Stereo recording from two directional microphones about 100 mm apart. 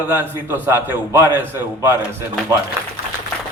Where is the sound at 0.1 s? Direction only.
20° right (ahead or behind).